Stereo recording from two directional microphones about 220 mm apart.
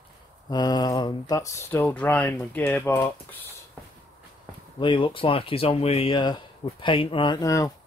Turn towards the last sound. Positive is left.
turn(degrees=15)  # may be behind; listen again after turning